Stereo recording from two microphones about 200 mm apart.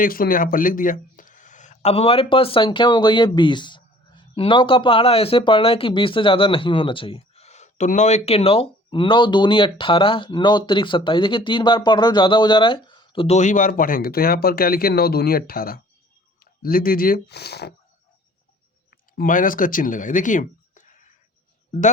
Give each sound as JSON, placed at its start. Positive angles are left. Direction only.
{"t": 0.0, "sound": "speech", "side_deg": 45}
{"t": 18.9, "sound": "speech", "side_deg": 45}